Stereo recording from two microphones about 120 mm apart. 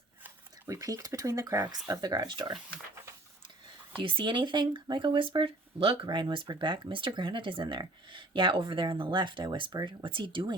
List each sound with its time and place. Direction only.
0.7 s speech: 30° right (ahead or behind)
4.0 s speech: 40° right (ahead or behind)